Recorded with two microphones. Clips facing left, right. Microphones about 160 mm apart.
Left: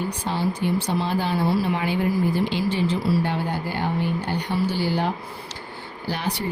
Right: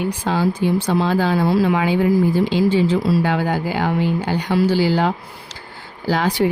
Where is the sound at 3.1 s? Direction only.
90° right.